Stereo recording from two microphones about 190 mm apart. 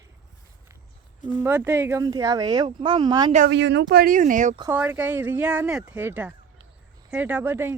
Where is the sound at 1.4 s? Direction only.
10° right (ahead or behind).